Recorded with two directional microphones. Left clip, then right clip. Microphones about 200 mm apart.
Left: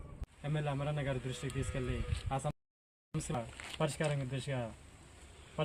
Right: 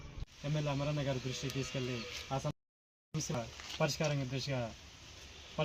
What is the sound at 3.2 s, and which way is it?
Speech, 5° left (ahead or behind).